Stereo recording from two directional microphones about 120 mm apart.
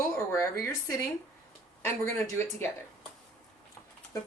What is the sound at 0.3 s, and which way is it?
Speech, 25° left (ahead or behind).